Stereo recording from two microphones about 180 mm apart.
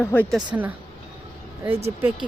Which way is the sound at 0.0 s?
10° left (ahead or behind).